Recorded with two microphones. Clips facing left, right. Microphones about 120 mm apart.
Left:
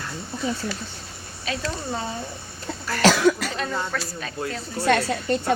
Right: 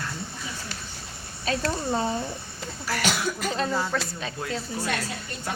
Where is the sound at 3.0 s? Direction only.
90° left.